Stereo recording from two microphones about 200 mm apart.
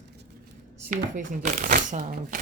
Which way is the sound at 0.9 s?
40° right (ahead or behind).